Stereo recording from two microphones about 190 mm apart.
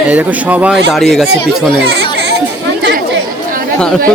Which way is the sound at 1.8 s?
60° right (ahead or behind).